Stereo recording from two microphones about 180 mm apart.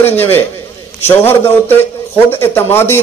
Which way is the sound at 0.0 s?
10° left (ahead or behind).